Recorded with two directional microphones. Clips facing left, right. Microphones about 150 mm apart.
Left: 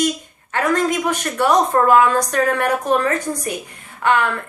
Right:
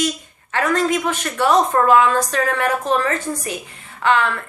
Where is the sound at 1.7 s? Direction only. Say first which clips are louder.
Left 1 dB; 35° left (ahead or behind).